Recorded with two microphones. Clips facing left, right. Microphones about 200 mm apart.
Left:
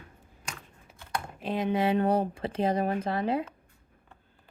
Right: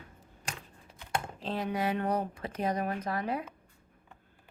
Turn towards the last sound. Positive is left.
turn(degrees=25)  # may be behind; listen again after turning